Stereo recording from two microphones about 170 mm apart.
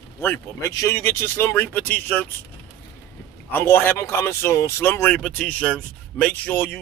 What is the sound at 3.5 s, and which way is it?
Speech, 10° left (ahead or behind).